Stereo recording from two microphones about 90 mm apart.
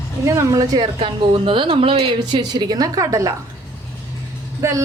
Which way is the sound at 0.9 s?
70° right (ahead or behind).